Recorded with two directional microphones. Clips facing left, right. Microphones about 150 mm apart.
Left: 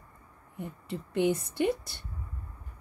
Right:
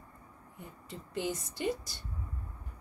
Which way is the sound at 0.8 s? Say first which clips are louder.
Left 9 dB; 60° left (ahead or behind).